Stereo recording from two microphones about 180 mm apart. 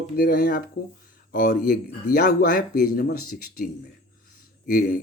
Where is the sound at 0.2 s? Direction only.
55° left (ahead or behind).